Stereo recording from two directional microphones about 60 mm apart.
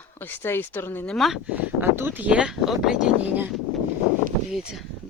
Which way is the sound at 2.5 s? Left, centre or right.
Centre.